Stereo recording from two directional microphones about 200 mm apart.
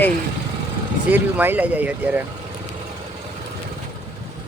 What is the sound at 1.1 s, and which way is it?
Speech, 10° right (ahead or behind).